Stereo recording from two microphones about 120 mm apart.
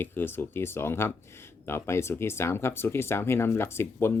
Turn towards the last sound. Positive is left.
turn(degrees=20)  # may be behind; listen again after turning